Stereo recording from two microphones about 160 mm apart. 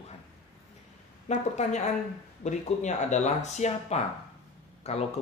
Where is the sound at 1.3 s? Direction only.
45° left (ahead or behind).